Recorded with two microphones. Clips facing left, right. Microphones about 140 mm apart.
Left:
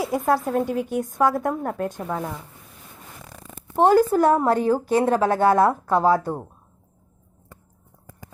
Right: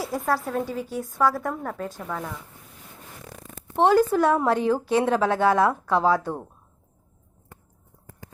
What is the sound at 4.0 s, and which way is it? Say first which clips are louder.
Speech: left 2 dB; 10° left (ahead or behind).